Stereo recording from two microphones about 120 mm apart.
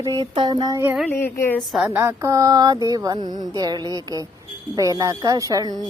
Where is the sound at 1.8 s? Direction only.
20° right (ahead or behind).